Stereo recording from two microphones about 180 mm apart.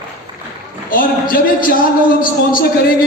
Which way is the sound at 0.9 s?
50° left (ahead or behind).